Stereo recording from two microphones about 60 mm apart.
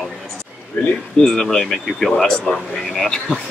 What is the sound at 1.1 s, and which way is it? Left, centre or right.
Speech, centre.